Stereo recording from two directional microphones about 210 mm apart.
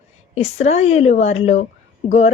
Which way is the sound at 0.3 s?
30° left (ahead or behind).